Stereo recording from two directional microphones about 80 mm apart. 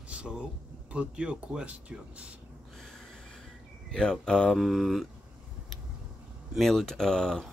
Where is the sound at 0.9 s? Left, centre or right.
Centre.